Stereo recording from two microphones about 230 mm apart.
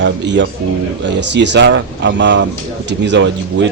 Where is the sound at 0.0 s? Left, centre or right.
Right.